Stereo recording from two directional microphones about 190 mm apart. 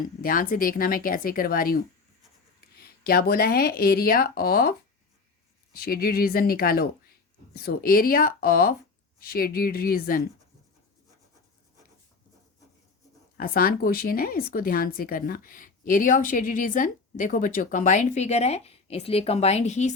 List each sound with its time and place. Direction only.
0.2 s a woman's voice: 50° left (ahead or behind)
5.7 s a woman's voice: 50° left (ahead or behind)
13.3 s a woman's voice: 50° left (ahead or behind)